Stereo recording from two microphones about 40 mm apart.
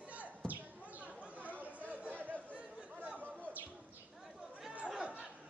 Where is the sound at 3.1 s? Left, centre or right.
Right.